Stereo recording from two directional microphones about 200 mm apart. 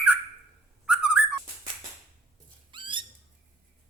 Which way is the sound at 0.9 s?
5° right (ahead or behind).